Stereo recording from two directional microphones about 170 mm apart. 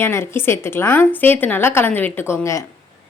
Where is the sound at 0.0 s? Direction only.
15° left (ahead or behind).